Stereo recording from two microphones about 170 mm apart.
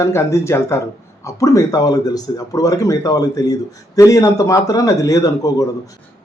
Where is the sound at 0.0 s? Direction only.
15° left (ahead or behind).